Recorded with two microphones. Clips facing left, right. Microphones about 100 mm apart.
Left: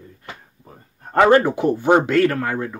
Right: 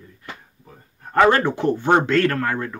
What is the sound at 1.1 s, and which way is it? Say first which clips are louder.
Speech: left 2 dB; 20° left (ahead or behind).